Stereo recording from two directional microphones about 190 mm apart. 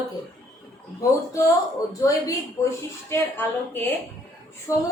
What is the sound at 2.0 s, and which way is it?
A woman's voice, 15° left (ahead or behind).